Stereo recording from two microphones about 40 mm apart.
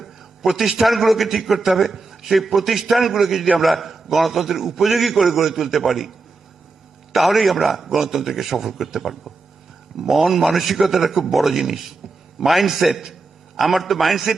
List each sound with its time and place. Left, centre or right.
0.0 s a man's voice: centre
7.1 s a man's voice: centre